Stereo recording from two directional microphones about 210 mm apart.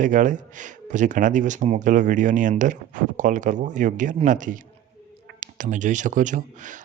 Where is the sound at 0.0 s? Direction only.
40° right (ahead or behind).